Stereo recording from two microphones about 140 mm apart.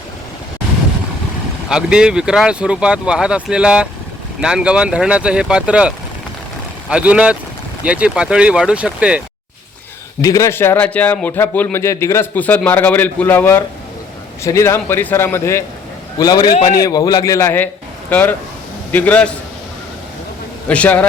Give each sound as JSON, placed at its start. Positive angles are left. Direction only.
{"t": 1.7, "sound": "speech", "side_deg": -5}
{"t": 6.9, "sound": "speech", "side_deg": -10}
{"t": 10.2, "sound": "a man's voice", "side_deg": 25}
{"t": 16.1, "sound": "a man's voice", "side_deg": 30}
{"t": 20.7, "sound": "a man's voice", "side_deg": 10}